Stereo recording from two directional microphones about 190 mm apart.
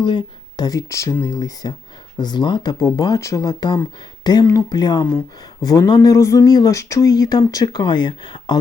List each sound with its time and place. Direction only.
0.0 s speech: 25° left (ahead or behind)